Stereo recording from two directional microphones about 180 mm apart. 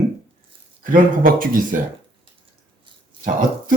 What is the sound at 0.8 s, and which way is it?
Speech, 50° right (ahead or behind).